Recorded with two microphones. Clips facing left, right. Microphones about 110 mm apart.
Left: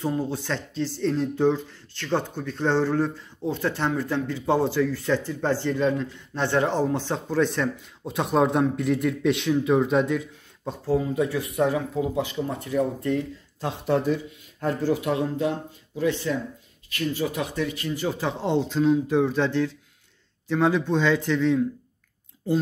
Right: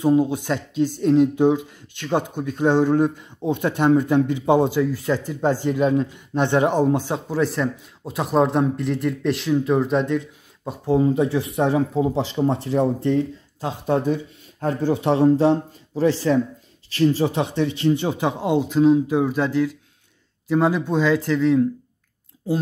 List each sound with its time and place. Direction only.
0.0 s speech: 15° right (ahead or behind)
11.0 s speech: 30° right (ahead or behind)
13.6 s speech: 15° right (ahead or behind)
15.0 s speech: 30° right (ahead or behind); by 21.6 s 5° right (ahead or behind)